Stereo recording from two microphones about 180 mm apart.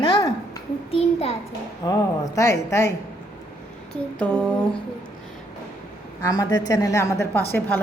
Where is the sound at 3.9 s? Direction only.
5° left (ahead or behind).